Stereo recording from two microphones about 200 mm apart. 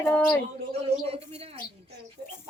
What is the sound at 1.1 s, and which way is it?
Speech, 30° right (ahead or behind).